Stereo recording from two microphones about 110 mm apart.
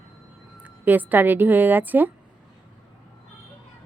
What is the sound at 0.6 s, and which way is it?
A woman's voice, 15° right (ahead or behind).